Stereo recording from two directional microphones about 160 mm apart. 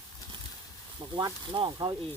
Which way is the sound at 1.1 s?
30° right (ahead or behind).